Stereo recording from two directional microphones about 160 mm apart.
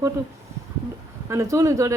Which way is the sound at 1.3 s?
20° right (ahead or behind).